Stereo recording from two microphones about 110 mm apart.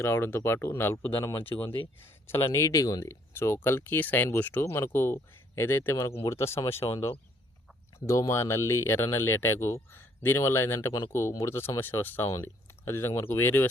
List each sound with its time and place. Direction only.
0.0 s speech: 20° left (ahead or behind)
6.8 s speech: 45° left (ahead or behind)
7.9 s speech: 25° left (ahead or behind)